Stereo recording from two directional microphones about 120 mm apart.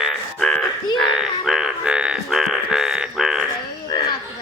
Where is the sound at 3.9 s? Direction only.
35° left (ahead or behind).